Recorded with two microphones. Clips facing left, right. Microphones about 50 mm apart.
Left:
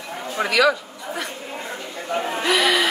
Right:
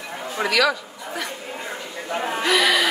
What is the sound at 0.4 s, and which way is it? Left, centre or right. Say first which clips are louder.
Speech: left 2 dB; centre.